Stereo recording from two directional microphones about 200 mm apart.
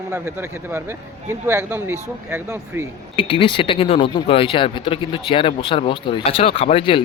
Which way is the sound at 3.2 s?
25° left (ahead or behind).